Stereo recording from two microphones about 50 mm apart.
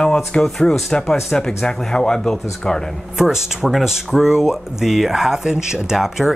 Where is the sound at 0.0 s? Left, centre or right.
Centre.